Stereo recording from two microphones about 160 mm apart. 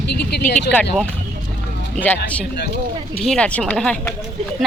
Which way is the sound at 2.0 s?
10° left (ahead or behind).